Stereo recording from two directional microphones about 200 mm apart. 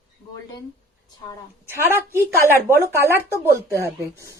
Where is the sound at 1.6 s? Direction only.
10° right (ahead or behind).